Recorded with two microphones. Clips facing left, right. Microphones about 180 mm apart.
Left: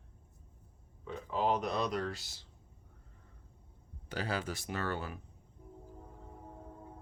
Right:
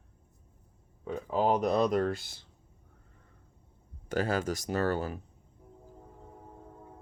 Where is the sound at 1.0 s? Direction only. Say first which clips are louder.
Right 5 dB; 40° right (ahead or behind).